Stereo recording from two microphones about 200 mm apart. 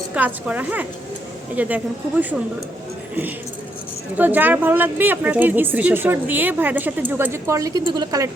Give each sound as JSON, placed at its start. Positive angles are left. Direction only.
{"t": 0.1, "sound": "a woman's voice", "side_deg": -5}
{"t": 4.2, "sound": "a woman's voice", "side_deg": -10}